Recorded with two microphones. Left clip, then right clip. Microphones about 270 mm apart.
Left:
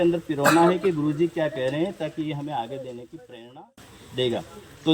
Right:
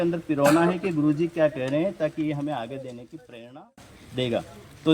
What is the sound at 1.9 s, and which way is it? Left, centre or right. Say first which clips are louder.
Speech: right 3 dB; centre.